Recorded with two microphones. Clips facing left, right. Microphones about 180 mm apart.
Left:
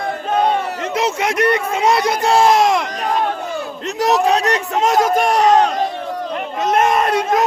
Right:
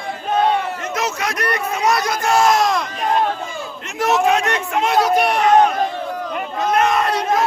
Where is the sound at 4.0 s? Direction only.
35° left (ahead or behind).